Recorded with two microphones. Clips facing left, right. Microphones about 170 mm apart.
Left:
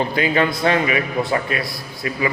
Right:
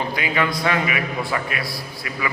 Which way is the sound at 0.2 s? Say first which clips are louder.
Left 5 dB; 30° left (ahead or behind).